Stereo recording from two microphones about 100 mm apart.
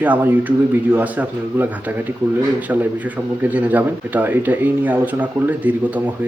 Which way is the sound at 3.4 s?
15° right (ahead or behind).